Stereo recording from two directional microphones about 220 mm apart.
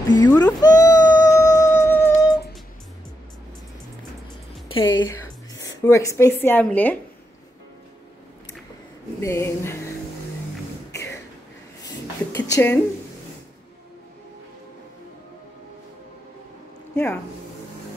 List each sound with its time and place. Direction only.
0.2 s speech: 20° left (ahead or behind)
0.6 s music: 15° left (ahead or behind)
4.6 s music: 25° left (ahead or behind)
5.9 s a woman's voice: 15° left (ahead or behind)
9.2 s a woman's voice: 10° left (ahead or behind)
10.9 s a sound: 15° left (ahead or behind)
12.4 s a woman's voice: 15° left (ahead or behind)
16.9 s speech: 5° left (ahead or behind)